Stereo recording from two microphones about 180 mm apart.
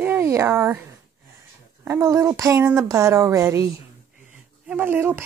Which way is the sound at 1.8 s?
15° right (ahead or behind).